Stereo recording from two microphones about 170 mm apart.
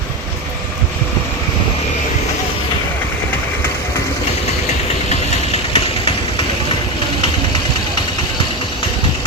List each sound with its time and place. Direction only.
5.0 s vehicle: 40° left (ahead or behind)